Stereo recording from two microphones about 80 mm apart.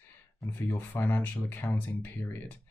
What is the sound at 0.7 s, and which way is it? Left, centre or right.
Speech, left.